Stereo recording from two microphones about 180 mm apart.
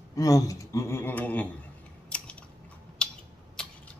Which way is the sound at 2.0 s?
5° left (ahead or behind).